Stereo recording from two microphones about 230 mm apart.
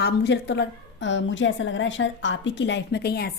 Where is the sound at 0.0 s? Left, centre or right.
Left.